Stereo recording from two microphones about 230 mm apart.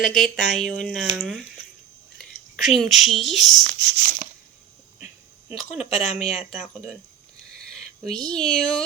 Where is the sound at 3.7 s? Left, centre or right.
Right.